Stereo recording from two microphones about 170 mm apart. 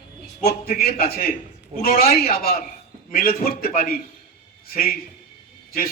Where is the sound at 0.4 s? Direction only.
65° left (ahead or behind).